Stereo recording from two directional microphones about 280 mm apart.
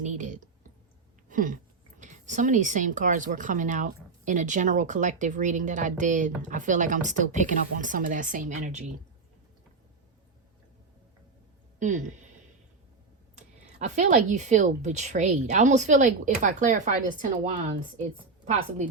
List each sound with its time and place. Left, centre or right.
0.0 s speech: right
1.3 s a sound: right
2.0 s a woman's voice: right
11.8 s a woman's voice: right
13.7 s a woman's voice: right